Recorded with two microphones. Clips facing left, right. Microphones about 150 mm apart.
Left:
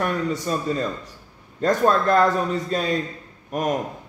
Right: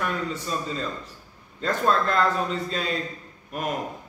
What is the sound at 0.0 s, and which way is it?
Speech, 45° left (ahead or behind).